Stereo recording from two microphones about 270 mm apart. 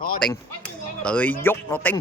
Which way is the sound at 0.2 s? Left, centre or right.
Centre.